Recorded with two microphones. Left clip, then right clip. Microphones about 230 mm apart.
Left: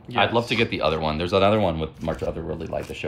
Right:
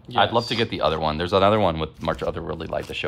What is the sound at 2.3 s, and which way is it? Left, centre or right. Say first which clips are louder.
Speech: right 1 dB; right.